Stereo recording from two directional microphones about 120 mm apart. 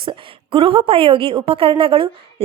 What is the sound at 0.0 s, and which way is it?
A woman's voice, 45° right (ahead or behind).